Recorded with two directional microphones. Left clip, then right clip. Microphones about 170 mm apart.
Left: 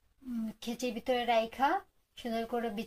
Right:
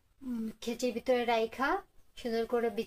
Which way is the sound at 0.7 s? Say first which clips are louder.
Right 2 dB; 30° right (ahead or behind).